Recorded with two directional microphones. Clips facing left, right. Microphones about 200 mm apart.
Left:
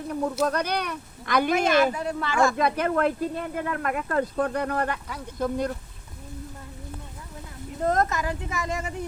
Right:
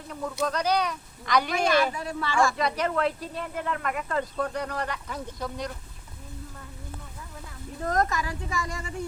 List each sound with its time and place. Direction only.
0.1 s speech: 55° left (ahead or behind)
1.6 s speech: 20° left (ahead or behind)
2.6 s speech: 50° left (ahead or behind)
7.9 s speech: 20° left (ahead or behind)